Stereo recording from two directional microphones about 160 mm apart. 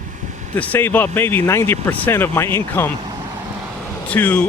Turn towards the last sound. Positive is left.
turn(degrees=10)  # may be behind; listen again after turning